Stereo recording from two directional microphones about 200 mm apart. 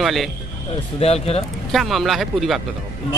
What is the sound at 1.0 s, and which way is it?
Speech, 30° left (ahead or behind).